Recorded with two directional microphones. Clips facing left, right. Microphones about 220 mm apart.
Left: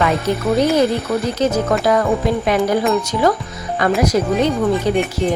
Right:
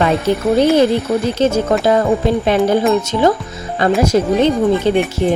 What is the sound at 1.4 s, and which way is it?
Speech, 25° right (ahead or behind).